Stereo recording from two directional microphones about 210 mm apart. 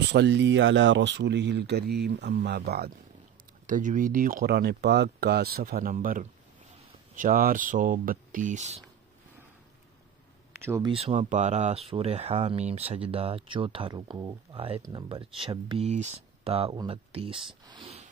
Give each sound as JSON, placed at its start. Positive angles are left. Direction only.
{"t": 0.1, "sound": "speech", "side_deg": -55}
{"t": 3.6, "sound": "speech", "side_deg": -40}
{"t": 10.5, "sound": "speech", "side_deg": -10}
{"t": 10.9, "sound": "speech", "side_deg": -30}
{"t": 17.6, "sound": "a sound", "side_deg": -25}